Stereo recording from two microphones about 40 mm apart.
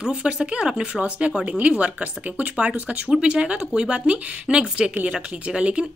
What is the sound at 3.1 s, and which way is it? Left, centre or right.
A woman's voice, right.